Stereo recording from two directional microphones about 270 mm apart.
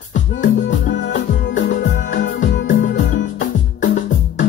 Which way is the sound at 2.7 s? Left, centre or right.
Left.